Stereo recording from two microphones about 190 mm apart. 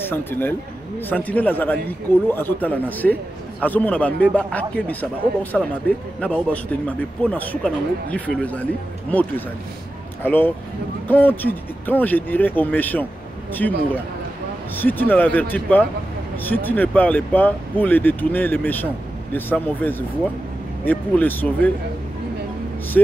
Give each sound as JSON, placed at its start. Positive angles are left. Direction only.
{"t": 0.1, "sound": "a man's voice", "side_deg": 10}
{"t": 23.0, "sound": "speech", "side_deg": 5}